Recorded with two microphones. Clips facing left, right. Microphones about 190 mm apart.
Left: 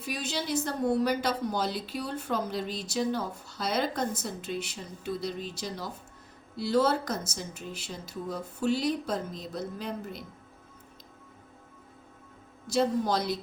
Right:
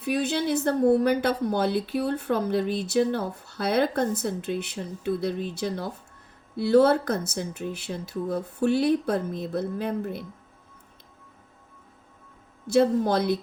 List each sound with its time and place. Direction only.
0.0 s a woman's voice: 60° right (ahead or behind)
12.6 s a woman's voice: 60° right (ahead or behind)